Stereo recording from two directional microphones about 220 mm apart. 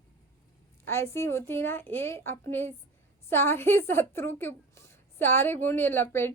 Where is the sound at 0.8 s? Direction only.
10° left (ahead or behind).